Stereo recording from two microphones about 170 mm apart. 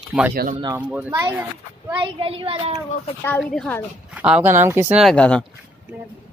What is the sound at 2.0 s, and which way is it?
Speech, 30° right (ahead or behind).